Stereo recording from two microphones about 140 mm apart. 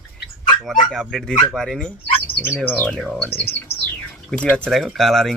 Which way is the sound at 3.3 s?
15° left (ahead or behind).